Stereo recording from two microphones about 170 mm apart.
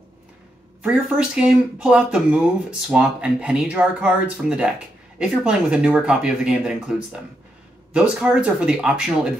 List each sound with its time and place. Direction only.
0.8 s speech: 5° right (ahead or behind)